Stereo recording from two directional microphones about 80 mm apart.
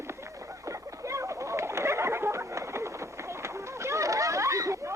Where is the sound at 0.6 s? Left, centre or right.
Right.